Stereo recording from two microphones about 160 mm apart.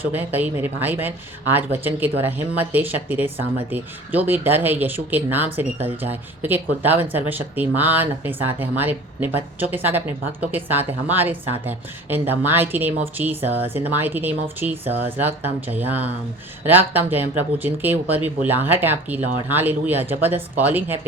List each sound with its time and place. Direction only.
0.0 s speech: 10° right (ahead or behind)
13.5 s speech: 35° right (ahead or behind)
13.7 s speech: 10° right (ahead or behind)